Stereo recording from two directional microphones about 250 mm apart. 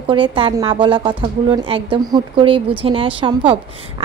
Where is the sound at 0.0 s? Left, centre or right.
Right.